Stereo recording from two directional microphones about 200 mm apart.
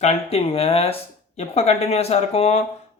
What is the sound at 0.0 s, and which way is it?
Speech, 30° left (ahead or behind).